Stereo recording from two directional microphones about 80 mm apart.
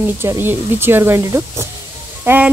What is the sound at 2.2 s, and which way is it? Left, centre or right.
Speech, right.